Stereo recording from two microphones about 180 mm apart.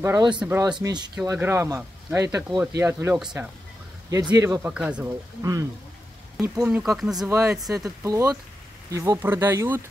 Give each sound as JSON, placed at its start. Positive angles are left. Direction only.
{"t": 0.0, "sound": "speech", "side_deg": -20}
{"t": 0.7, "sound": "speech", "side_deg": -25}
{"t": 4.5, "sound": "speech", "side_deg": -5}
{"t": 5.4, "sound": "speech", "side_deg": -20}
{"t": 7.2, "sound": "speech", "side_deg": -15}